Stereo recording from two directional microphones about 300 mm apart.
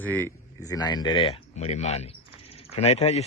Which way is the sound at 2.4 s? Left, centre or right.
Centre.